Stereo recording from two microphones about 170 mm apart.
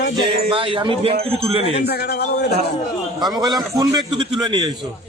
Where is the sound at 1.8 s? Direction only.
70° left (ahead or behind).